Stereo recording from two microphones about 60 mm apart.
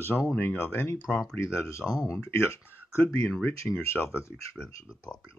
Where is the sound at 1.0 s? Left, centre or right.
Centre.